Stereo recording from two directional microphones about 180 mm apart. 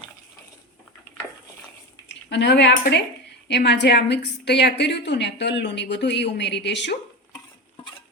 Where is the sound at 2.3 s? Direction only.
75° left (ahead or behind).